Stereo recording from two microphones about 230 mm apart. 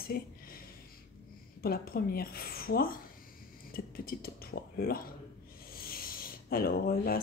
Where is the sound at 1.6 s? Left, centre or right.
Left.